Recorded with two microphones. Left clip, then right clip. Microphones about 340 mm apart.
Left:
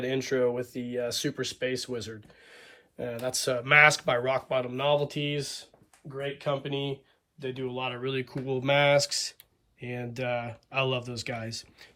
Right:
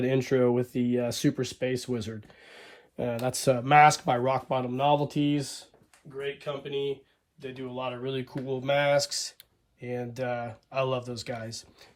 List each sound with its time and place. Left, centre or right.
0.0 s speech: centre
6.4 s speech: centre